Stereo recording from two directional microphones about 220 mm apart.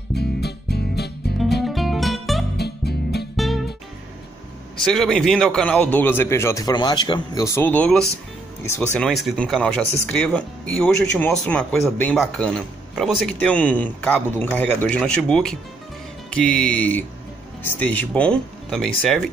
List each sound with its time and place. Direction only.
0.1 s music: 45° left (ahead or behind)
1.6 s music: centre (ahead or behind)
2.5 s music: 45° left (ahead or behind)
3.3 s music: centre (ahead or behind)
4.7 s a man's voice: centre (ahead or behind)